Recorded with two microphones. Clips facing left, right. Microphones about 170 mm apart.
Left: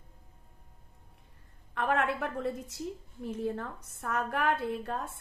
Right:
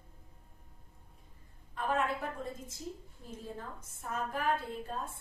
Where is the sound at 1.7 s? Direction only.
70° left (ahead or behind).